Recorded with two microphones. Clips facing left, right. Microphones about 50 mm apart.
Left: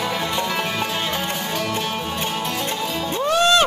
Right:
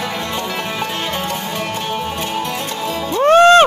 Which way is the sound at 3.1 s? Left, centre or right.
Right.